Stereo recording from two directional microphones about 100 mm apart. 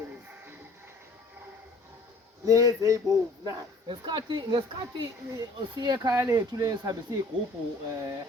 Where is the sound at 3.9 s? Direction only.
50° right (ahead or behind).